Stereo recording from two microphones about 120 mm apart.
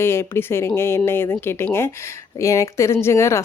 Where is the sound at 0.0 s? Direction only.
20° left (ahead or behind).